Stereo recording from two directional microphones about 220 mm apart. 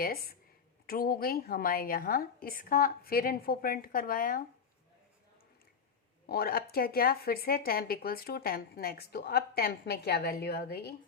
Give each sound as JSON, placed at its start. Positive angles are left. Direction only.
{"t": 0.0, "sound": "a woman's voice", "side_deg": 45}
{"t": 6.2, "sound": "speech", "side_deg": 45}